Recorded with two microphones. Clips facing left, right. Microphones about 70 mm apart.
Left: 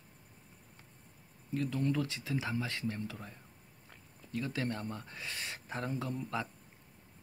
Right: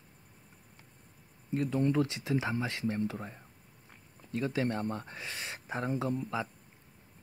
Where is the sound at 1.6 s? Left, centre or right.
Right.